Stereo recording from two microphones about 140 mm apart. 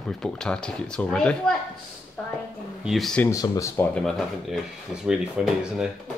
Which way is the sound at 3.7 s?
10° left (ahead or behind).